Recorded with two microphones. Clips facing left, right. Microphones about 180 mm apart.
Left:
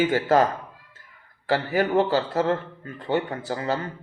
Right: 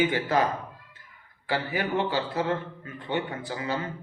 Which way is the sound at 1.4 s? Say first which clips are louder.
Left 6 dB; 40° left (ahead or behind).